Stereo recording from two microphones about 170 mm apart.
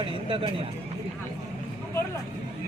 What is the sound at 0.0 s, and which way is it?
Speech, 30° right (ahead or behind).